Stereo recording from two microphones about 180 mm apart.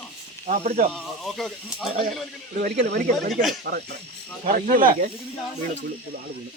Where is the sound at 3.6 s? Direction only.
60° right (ahead or behind).